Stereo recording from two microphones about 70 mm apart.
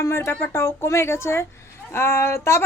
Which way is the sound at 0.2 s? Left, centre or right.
Left.